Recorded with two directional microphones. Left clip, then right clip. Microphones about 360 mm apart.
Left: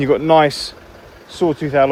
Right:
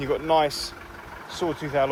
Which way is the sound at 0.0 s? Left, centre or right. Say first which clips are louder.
Left 9 dB; left.